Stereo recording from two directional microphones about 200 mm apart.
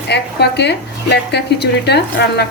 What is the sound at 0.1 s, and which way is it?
Speech, 60° left (ahead or behind).